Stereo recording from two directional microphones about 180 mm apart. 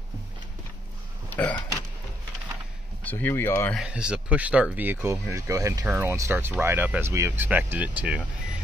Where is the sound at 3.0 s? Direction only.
10° left (ahead or behind).